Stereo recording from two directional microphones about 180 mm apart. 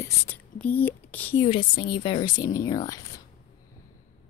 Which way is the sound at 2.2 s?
50° left (ahead or behind).